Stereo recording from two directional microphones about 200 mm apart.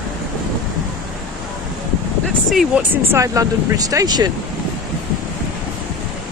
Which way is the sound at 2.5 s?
Centre (ahead or behind).